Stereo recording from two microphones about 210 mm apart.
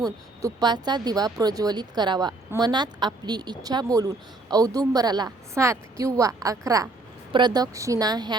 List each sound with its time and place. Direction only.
0.0 s speech: 20° right (ahead or behind)